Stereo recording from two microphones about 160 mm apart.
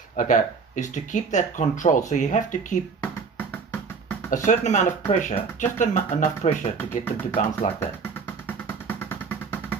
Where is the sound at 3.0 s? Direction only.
10° left (ahead or behind).